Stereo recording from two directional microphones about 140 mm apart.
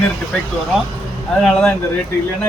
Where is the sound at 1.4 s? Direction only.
5° left (ahead or behind).